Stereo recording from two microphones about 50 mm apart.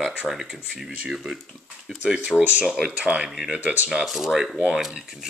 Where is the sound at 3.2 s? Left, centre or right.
Centre.